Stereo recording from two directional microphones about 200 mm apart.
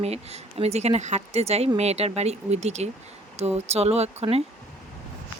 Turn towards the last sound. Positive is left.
turn(degrees=-30)  # may be behind; listen again after turning